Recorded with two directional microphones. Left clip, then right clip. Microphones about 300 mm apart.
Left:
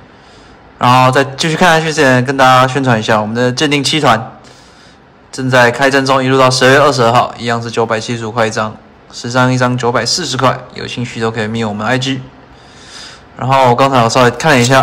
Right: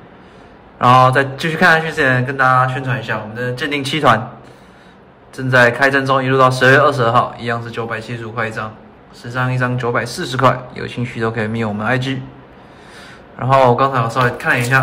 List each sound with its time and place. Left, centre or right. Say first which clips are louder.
0.7 s a man's voice: left 2 dB; centre
5.3 s a man's voice: left 3 dB; centre